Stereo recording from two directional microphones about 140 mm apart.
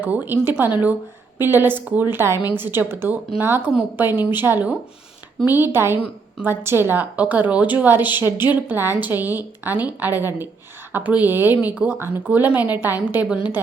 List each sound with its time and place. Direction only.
0.0 s a woman's voice: 15° right (ahead or behind)